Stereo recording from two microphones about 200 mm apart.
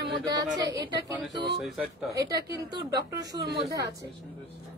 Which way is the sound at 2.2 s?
20° right (ahead or behind).